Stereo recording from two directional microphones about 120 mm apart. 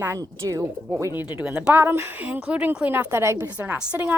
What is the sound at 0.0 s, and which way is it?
Speech, 25° right (ahead or behind).